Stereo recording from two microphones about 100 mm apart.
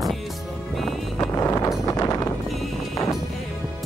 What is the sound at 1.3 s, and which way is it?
Wind noise, 30° left (ahead or behind).